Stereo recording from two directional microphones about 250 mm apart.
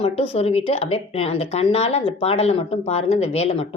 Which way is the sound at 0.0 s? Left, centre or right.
Left.